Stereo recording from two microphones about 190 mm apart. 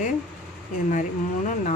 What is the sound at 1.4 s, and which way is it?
Speech, 40° left (ahead or behind).